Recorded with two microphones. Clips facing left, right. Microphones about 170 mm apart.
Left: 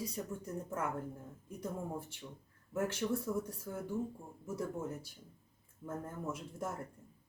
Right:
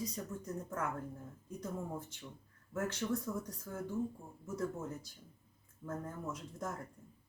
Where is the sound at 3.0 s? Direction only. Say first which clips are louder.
Left 2 dB; 10° left (ahead or behind).